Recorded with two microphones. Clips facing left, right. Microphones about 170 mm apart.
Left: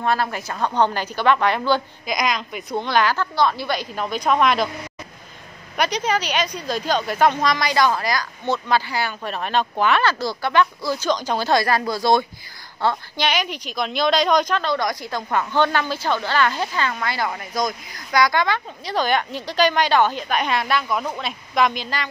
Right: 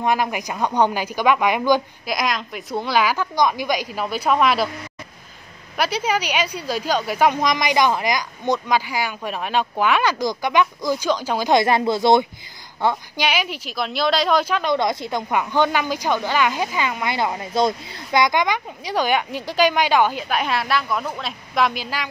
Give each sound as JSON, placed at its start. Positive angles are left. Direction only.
{"t": 0.0, "sound": "speech", "side_deg": -15}
{"t": 2.1, "sound": "speech", "side_deg": 0}
{"t": 5.8, "sound": "speech", "side_deg": -5}
{"t": 12.8, "sound": "speech", "side_deg": -10}
{"t": 14.7, "sound": "a woman's voice", "side_deg": -25}